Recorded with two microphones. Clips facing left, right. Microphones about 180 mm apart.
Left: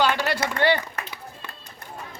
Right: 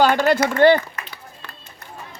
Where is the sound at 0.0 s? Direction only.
50° right (ahead or behind).